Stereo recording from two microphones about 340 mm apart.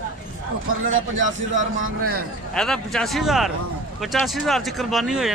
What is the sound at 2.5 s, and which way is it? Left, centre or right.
Speech, centre.